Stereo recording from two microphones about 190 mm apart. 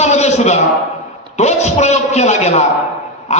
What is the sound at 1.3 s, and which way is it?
A man's voice, 35° left (ahead or behind).